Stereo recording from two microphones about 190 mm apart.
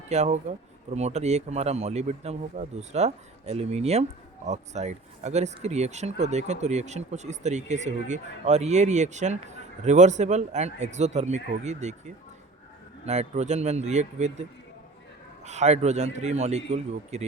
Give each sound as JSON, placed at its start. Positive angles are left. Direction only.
{"t": 0.1, "sound": "speech", "side_deg": -35}
{"t": 15.4, "sound": "speech", "side_deg": -35}